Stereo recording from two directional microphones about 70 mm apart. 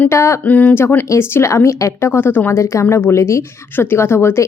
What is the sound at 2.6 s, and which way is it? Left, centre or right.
A woman's voice, left.